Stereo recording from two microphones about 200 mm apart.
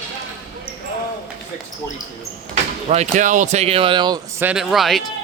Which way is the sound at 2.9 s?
35° right (ahead or behind).